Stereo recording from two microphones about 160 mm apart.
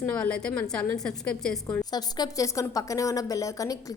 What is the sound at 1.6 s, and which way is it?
A woman's voice, 20° left (ahead or behind).